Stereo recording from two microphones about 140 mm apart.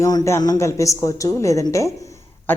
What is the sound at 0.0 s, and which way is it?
Speech, 25° left (ahead or behind).